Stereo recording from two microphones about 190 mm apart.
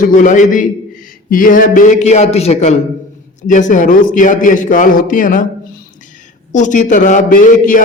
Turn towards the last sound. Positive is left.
turn(degrees=45)  # may be behind; listen again after turning